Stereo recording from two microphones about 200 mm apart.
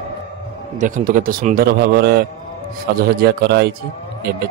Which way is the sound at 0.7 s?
40° right (ahead or behind).